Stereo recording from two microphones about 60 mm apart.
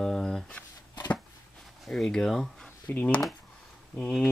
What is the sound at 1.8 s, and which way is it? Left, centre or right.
Speech, centre.